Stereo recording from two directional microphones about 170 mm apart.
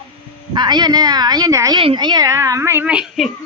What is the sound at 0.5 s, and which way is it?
Speech, 25° right (ahead or behind).